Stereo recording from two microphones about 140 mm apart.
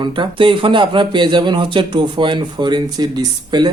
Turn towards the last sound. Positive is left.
turn(degrees=-30)  # may be behind; listen again after turning